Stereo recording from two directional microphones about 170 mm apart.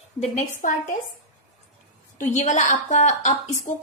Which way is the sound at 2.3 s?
45° left (ahead or behind).